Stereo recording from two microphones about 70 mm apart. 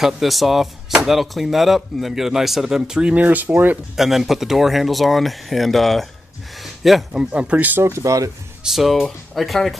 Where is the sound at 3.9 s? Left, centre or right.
Centre.